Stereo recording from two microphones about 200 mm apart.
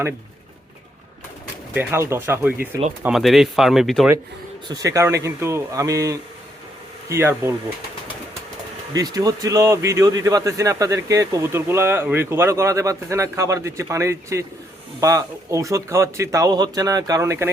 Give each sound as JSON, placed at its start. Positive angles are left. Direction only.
{"t": 1.7, "sound": "a man's voice", "side_deg": -10}
{"t": 4.7, "sound": "a man's voice", "side_deg": -15}
{"t": 8.9, "sound": "a man's voice", "side_deg": -20}